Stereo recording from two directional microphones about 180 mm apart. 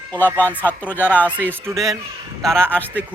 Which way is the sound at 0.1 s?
10° left (ahead or behind).